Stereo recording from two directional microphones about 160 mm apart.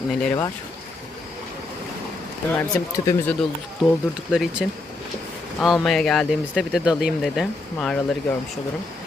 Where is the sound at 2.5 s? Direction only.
15° left (ahead or behind).